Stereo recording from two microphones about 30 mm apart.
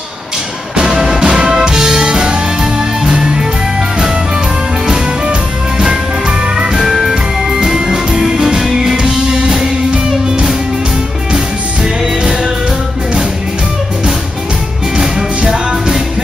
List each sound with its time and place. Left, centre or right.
0.7 s music: centre
1.2 s music: right
6.2 s music: right
11.3 s music: centre
15.0 s music: centre